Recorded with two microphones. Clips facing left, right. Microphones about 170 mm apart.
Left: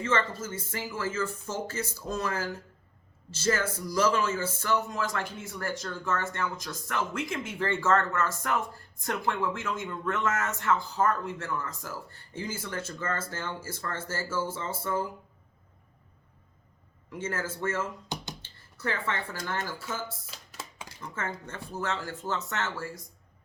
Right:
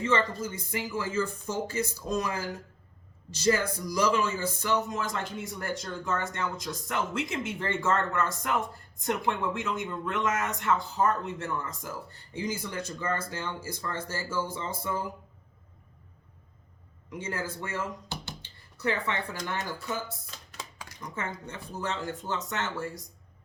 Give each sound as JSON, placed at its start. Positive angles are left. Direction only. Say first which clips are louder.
{"t": 0.0, "sound": "speech", "louder": "right 2 dB", "side_deg": -15}
{"t": 17.1, "sound": "speech", "louder": "left 1 dB", "side_deg": -15}
{"t": 18.1, "sound": "a sound", "louder": "left 2 dB", "side_deg": 15}
{"t": 18.4, "sound": "speech", "louder": "right 4 dB", "side_deg": -15}
{"t": 21.4, "sound": "speech", "louder": "left 1 dB", "side_deg": -15}